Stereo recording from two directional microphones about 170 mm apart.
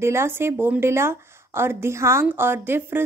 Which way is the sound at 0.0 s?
15° right (ahead or behind).